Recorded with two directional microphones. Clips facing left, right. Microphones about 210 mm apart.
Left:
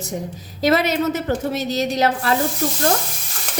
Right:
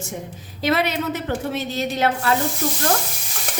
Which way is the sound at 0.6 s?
40° left (ahead or behind).